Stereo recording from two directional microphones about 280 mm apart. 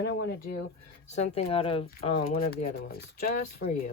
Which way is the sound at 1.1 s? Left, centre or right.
Left.